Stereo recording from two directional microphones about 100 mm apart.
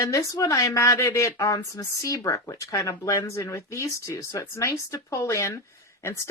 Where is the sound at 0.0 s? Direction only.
30° left (ahead or behind).